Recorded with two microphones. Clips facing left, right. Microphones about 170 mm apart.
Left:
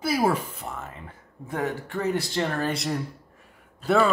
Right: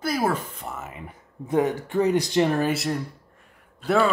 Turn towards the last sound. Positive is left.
turn(degrees=0)  # may be behind; listen again after turning